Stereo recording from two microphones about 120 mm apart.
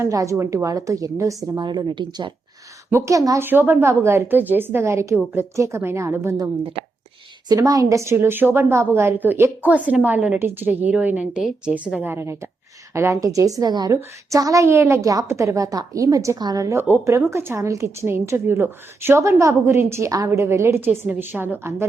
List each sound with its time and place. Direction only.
0.0 s a woman's voice: 25° right (ahead or behind)
2.9 s a woman's voice: 25° right (ahead or behind)